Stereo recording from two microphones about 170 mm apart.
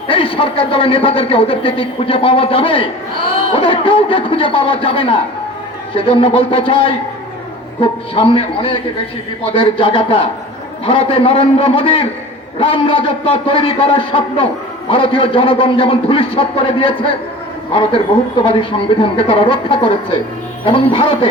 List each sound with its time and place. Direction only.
0.1 s a man's voice: 30° left (ahead or behind)